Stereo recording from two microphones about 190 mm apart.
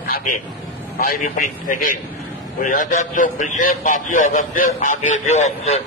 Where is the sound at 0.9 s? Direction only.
45° left (ahead or behind).